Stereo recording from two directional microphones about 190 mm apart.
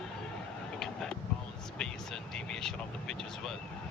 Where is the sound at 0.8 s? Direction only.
5° left (ahead or behind).